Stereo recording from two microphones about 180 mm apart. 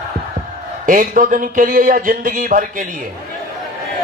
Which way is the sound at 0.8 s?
50° right (ahead or behind).